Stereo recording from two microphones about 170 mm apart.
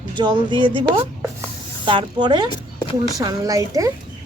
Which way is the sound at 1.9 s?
25° right (ahead or behind).